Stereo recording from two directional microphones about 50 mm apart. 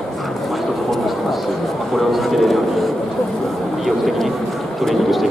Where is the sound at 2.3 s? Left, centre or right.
Centre.